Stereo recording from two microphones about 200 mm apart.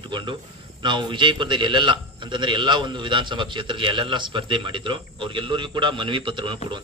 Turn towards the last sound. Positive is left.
turn(degrees=-25)  # may be behind; listen again after turning